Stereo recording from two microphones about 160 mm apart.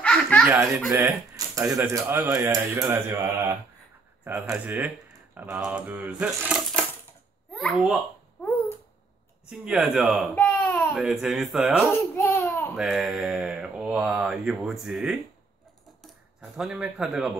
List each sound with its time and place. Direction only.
0.0 s laughter: 5° left (ahead or behind)
0.9 s a child's voice: 15° right (ahead or behind); by 8.0 s centre (ahead or behind)
8.4 s babbling: 10° left (ahead or behind)
9.5 s speech: centre (ahead or behind)
10.3 s a sound: 10° left (ahead or behind)
11.0 s speech: centre (ahead or behind)
11.9 s laughter: 15° left (ahead or behind)
12.7 s speech: centre (ahead or behind)